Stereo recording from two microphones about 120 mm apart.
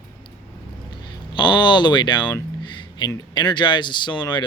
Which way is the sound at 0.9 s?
40° left (ahead or behind).